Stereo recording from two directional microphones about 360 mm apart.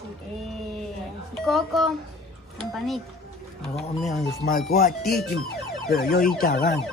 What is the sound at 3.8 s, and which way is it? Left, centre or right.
Speech, centre.